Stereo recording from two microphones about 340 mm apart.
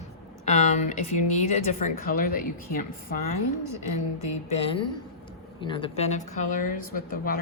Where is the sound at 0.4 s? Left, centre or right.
Left.